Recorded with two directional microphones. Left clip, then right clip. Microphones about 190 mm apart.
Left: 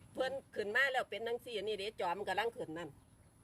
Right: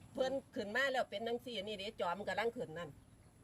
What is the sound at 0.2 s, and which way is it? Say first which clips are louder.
Speech: even; 35° left (ahead or behind).